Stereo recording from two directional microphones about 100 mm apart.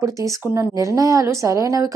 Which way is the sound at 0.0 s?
35° right (ahead or behind).